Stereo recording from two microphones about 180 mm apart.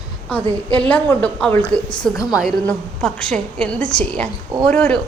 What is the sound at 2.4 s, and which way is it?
A woman's voice, centre (ahead or behind).